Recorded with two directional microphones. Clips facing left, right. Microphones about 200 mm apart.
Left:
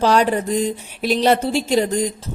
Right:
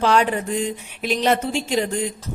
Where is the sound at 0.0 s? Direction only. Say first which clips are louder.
Left 2 dB; 35° left (ahead or behind).